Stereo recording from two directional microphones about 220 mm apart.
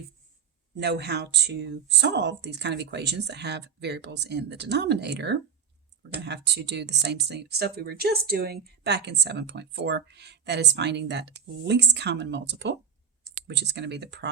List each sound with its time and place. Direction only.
0.8 s speech: 50° right (ahead or behind)